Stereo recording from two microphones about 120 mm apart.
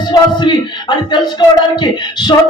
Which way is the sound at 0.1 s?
40° left (ahead or behind).